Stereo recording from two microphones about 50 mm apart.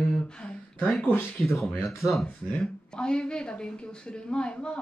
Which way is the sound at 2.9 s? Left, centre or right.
Centre.